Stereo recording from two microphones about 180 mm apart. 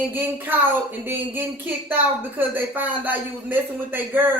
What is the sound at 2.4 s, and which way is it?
Speech, 10° right (ahead or behind).